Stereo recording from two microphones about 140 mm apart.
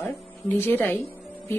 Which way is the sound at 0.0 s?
15° left (ahead or behind).